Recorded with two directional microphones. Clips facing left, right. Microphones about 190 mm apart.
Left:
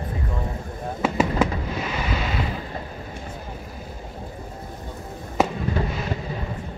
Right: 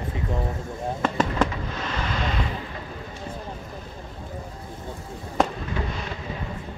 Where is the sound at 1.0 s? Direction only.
10° left (ahead or behind).